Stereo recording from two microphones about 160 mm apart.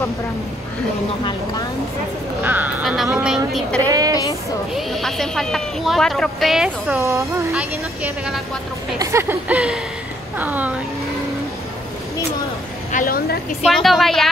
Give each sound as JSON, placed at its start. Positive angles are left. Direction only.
{"t": 2.4, "sound": "a sound", "side_deg": -10}
{"t": 3.8, "sound": "speech", "side_deg": -25}
{"t": 4.1, "sound": "speech", "side_deg": 25}
{"t": 4.7, "sound": "speech", "side_deg": 0}
{"t": 7.0, "sound": "a woman's voice", "side_deg": -20}
{"t": 7.5, "sound": "a woman's voice", "side_deg": -5}
{"t": 9.0, "sound": "a woman's voice", "side_deg": -15}
{"t": 12.9, "sound": "a woman's voice", "side_deg": 60}
{"t": 13.7, "sound": "speech", "side_deg": 0}